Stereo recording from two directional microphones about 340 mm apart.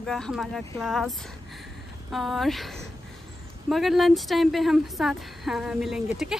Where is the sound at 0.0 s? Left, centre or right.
Centre.